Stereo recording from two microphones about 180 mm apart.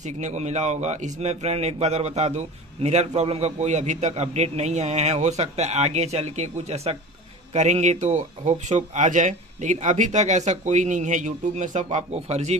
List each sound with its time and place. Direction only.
0.0 s speech: 40° right (ahead or behind)